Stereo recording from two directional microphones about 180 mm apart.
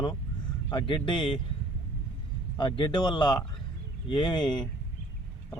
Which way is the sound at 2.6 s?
25° left (ahead or behind).